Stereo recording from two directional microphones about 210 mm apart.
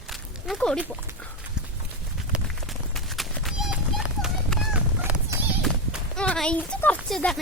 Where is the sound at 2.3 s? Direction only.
Centre (ahead or behind).